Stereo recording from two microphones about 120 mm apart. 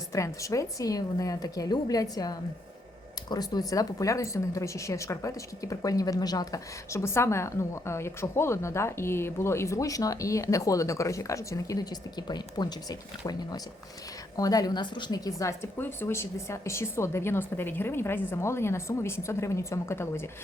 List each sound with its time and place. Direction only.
0.1 s a woman's voice: 25° left (ahead or behind)